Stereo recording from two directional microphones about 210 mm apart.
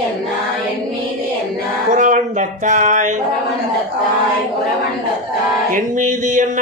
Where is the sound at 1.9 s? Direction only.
35° right (ahead or behind).